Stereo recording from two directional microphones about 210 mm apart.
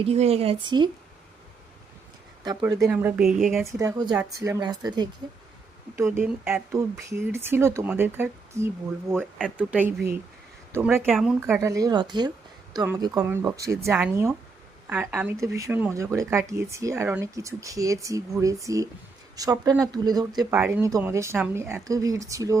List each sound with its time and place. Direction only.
0.0 s speech: 30° right (ahead or behind)
2.4 s speech: 20° right (ahead or behind); by 3.7 s centre (ahead or behind)
3.7 s speech: 15° right (ahead or behind)